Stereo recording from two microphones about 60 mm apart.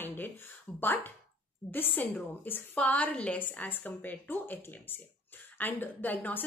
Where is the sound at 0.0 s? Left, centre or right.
Left.